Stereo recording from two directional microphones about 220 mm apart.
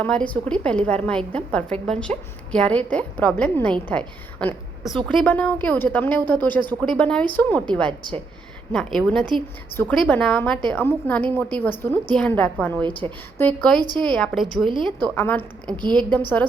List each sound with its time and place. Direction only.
0.0 s a woman's voice: 5° left (ahead or behind)
7.9 s a woman's voice: 20° right (ahead or behind)
8.7 s a woman's voice: centre (ahead or behind)